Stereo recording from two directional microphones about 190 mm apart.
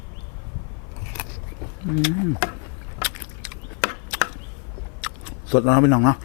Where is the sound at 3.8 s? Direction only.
10° left (ahead or behind).